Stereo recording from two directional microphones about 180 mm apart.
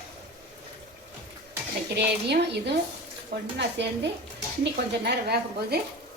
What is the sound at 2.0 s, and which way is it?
A woman's voice, 70° right (ahead or behind).